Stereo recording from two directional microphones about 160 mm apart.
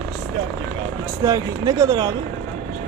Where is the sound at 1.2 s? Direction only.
20° right (ahead or behind).